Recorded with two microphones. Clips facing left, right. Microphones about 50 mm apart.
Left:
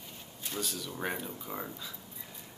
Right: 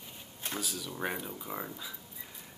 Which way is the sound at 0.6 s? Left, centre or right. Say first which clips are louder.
Left 1 dB; centre.